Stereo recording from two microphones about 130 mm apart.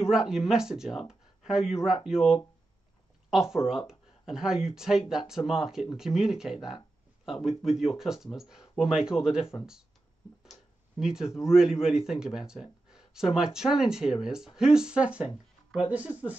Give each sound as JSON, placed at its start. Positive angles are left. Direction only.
{"t": 0.1, "sound": "speech", "side_deg": -5}